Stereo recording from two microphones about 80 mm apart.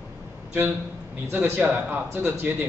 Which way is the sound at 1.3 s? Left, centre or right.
Right.